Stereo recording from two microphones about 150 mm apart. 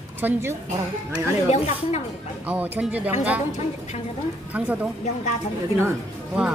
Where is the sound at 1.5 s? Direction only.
50° left (ahead or behind).